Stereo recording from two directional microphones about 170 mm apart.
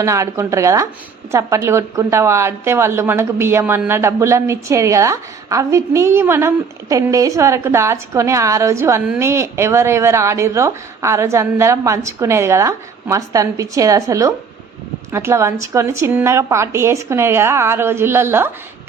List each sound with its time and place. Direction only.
0.0 s a woman's voice: 15° right (ahead or behind)